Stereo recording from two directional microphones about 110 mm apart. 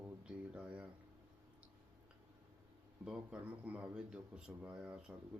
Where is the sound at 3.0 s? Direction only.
10° right (ahead or behind).